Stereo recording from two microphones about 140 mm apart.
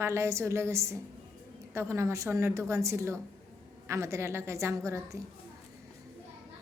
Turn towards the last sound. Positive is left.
turn(degrees=-20)  # may be behind; listen again after turning